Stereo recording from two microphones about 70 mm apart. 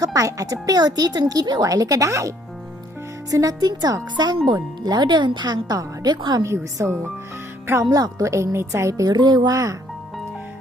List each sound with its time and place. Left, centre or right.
0.0 s speech: right
1.6 s a woman's voice: right
3.6 s speech: right
6.7 s speech: right
7.9 s speech: right
8.2 s a woman's voice: right
9.0 s speech: right